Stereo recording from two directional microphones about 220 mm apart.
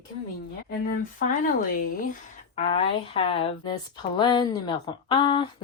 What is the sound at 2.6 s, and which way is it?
A woman's voice, 25° left (ahead or behind).